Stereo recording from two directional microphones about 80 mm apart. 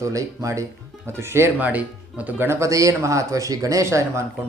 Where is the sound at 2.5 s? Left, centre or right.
Right.